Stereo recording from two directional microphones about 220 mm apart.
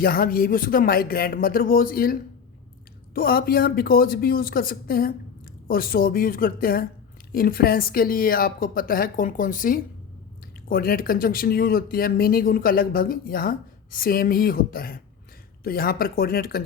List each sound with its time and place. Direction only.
0.0 s speech: 40° left (ahead or behind)
3.2 s speech: 40° left (ahead or behind)